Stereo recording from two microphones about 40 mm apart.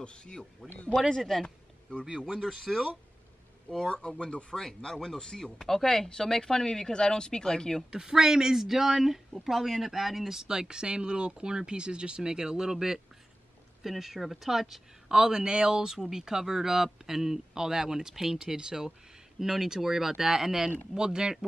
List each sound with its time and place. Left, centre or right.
0.0 s speech: left
1.0 s speech: centre
1.4 s a sound: left
2.4 s speech: centre
3.7 s speech: centre
4.2 s speech: left
4.6 s speech: centre
7.9 s speech: centre
10.4 s speech: right; by 14.8 s centre
15.0 s speech: centre